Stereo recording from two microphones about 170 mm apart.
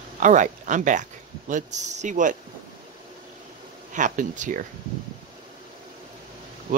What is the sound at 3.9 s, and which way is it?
Speech, 50° right (ahead or behind).